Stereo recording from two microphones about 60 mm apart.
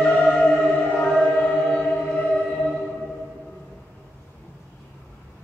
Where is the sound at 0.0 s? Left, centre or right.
Centre.